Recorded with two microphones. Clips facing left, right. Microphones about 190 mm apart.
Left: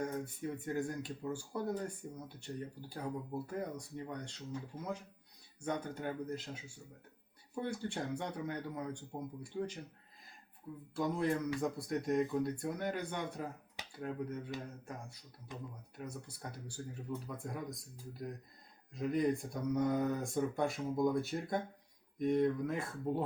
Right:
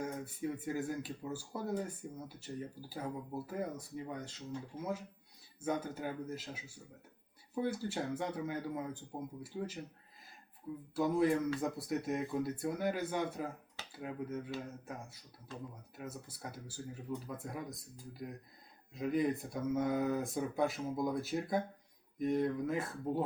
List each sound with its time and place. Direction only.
0.5 s speech: 5° right (ahead or behind)
10.9 s speech: 5° right (ahead or behind)
15.5 s speech: 15° left (ahead or behind)
16.0 s speech: 5° right (ahead or behind)